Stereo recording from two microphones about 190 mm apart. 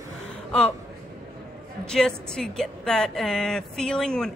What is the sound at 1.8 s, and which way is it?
A woman's voice, 5° left (ahead or behind).